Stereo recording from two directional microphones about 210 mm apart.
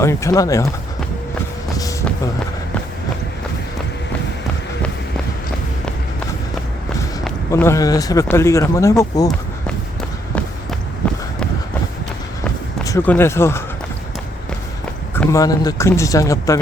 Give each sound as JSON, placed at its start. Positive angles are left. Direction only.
{"t": 0.0, "sound": "speech", "side_deg": 15}
{"t": 1.8, "sound": "vehicle", "side_deg": 15}
{"t": 7.5, "sound": "speech", "side_deg": 15}
{"t": 11.0, "sound": "a sound", "side_deg": 5}
{"t": 12.8, "sound": "speech", "side_deg": 10}
{"t": 15.1, "sound": "speech", "side_deg": 10}